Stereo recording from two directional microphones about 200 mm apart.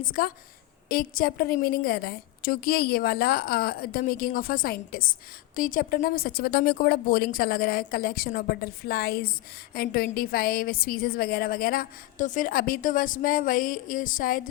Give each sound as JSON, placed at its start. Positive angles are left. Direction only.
{"t": 0.1, "sound": "a woman's voice", "side_deg": 45}